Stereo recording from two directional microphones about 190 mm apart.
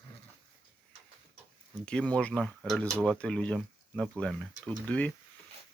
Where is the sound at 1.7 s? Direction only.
5° left (ahead or behind).